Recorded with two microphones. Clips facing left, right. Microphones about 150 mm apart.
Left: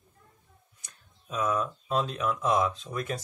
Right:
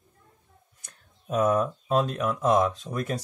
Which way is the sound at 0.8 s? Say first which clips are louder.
Right 9 dB; 50° right (ahead or behind).